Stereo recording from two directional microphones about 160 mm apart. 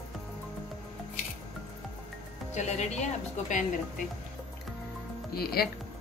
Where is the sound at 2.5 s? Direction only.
45° left (ahead or behind).